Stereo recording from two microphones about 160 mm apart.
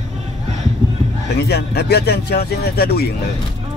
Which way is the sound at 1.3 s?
85° left.